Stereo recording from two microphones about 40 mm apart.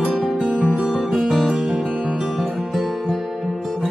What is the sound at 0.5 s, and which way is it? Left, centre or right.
Music, right.